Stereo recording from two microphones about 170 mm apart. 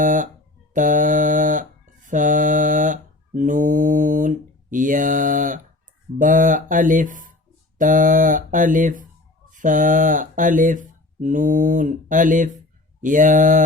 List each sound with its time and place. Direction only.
0.0 s mantra: 50° right (ahead or behind)
9.5 s speech: 50° right (ahead or behind)
13.0 s mantra: 50° right (ahead or behind)